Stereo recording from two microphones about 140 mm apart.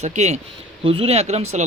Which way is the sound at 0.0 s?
55° right (ahead or behind).